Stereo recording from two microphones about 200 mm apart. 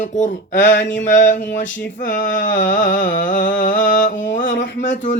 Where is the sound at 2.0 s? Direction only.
40° left (ahead or behind).